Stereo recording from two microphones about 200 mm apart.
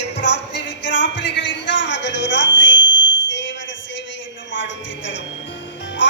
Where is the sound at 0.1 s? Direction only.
60° left (ahead or behind).